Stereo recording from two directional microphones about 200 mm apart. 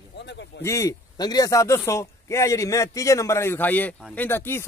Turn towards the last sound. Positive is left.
turn(degrees=10)  # may be behind; listen again after turning